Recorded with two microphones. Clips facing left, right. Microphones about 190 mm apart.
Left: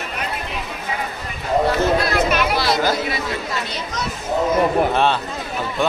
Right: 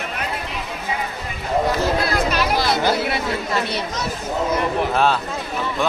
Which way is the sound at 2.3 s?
45° right (ahead or behind).